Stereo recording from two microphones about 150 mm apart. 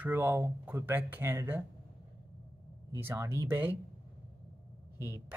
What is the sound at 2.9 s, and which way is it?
Speech, 20° right (ahead or behind).